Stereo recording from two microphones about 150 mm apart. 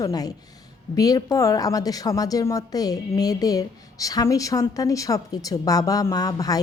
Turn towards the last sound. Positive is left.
turn(degrees=25)  # may be behind; listen again after turning